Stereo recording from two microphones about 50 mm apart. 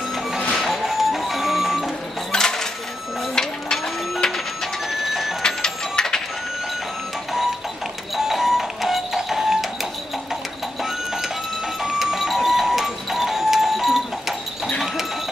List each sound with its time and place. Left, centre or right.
0.6 s music: centre
2.3 s coin: centre
3.3 s printer: centre
5.4 s printer: centre
8.2 s music: centre
11.8 s music: centre